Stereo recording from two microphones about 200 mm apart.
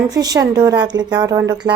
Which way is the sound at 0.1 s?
20° right (ahead or behind).